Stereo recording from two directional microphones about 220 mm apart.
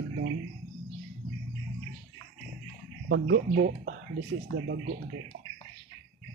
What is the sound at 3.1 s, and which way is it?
Speech, 50° right (ahead or behind).